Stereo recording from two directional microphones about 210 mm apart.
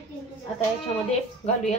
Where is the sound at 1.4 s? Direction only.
30° left (ahead or behind).